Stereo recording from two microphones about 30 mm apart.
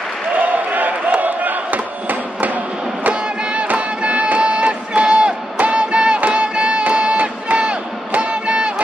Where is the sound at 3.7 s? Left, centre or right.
Right.